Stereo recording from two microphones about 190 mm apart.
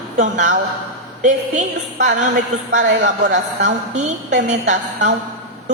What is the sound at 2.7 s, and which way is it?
A woman's voice, 45° right (ahead or behind).